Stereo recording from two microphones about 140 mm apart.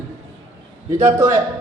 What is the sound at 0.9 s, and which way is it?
Speech, 20° right (ahead or behind).